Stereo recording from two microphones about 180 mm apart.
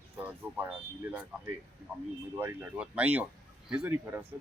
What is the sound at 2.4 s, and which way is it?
Speech, 10° right (ahead or behind).